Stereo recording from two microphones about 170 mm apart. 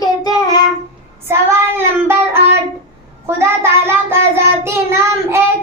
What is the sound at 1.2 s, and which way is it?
Child singing, 15° right (ahead or behind).